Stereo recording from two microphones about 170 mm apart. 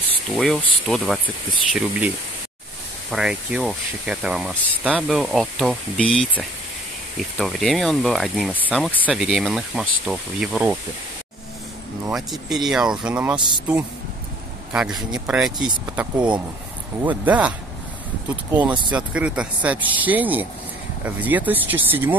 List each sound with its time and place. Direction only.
0.4 s speech: centre (ahead or behind)
12.1 s speech: centre (ahead or behind)
14.7 s speech: 5° right (ahead or behind)